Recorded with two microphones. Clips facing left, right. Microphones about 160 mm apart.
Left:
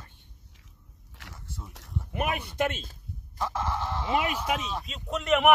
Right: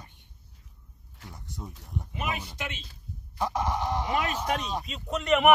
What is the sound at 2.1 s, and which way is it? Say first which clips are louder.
Speech: left 5 dB; 55° left (ahead or behind).